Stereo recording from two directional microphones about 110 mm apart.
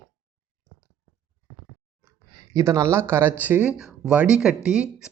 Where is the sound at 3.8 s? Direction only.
5° right (ahead or behind).